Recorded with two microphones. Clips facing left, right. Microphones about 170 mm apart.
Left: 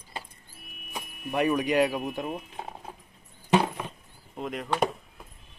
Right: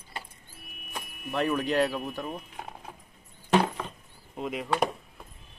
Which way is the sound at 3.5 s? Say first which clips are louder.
Even; 15° left (ahead or behind).